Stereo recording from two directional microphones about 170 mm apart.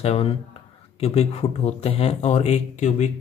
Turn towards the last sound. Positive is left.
turn(degrees=45)  # may be behind; listen again after turning